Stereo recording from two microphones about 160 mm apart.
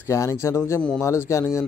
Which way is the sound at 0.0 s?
20° left (ahead or behind).